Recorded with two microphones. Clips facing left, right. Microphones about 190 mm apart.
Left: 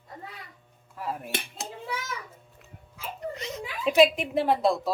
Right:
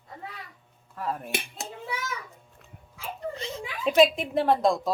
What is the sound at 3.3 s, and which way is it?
Speech, 30° right (ahead or behind).